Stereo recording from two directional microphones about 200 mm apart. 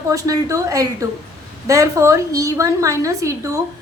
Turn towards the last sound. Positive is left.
turn(degrees=-15)  # may be behind; listen again after turning